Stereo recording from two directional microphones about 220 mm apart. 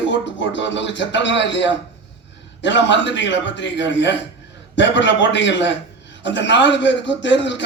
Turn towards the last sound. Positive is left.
turn(degrees=55)  # may be behind; listen again after turning